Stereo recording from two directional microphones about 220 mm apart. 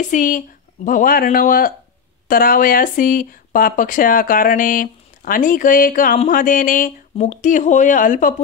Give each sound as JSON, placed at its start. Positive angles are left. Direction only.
{"t": 0.0, "sound": "speech", "side_deg": 35}